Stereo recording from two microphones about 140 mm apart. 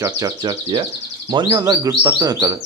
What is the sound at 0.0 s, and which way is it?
Speech, 30° right (ahead or behind).